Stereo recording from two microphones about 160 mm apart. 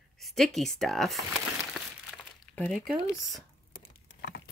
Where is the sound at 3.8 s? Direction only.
90° left.